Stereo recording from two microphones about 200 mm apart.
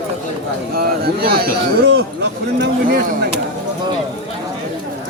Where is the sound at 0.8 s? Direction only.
50° right (ahead or behind).